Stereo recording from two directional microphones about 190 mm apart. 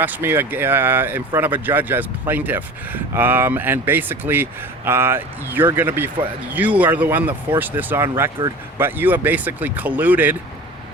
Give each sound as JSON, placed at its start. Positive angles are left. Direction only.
{"t": 0.0, "sound": "speech", "side_deg": -10}